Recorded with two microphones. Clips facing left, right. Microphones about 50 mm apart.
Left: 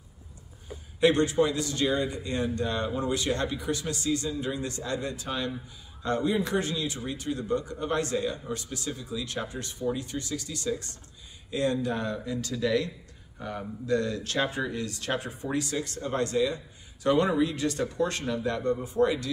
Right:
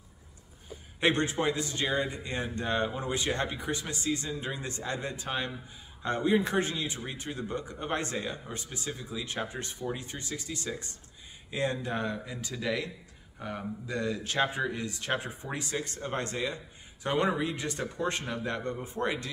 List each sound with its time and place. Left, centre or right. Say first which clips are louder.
1.0 s a man's voice: left 5 dB; right